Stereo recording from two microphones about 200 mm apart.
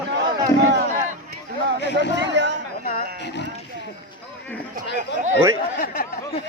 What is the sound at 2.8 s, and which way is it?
Speech, 55° left (ahead or behind).